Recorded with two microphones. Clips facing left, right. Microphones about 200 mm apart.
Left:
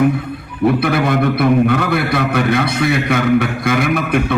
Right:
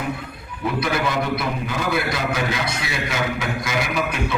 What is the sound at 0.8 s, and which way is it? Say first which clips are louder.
A man's voice: left 7 dB; 60° left (ahead or behind).